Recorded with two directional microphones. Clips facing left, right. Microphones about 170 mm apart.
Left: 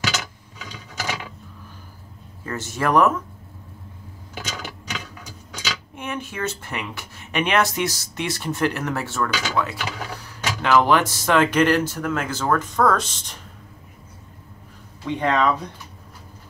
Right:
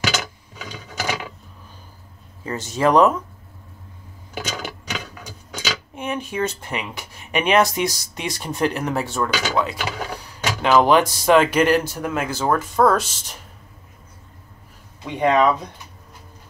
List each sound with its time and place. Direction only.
0.0 s a sound: 65° right (ahead or behind)
2.4 s speech: 15° right (ahead or behind)
4.4 s clock: 65° right (ahead or behind)
5.9 s speech: 15° right (ahead or behind)
15.0 s speech: 15° right (ahead or behind)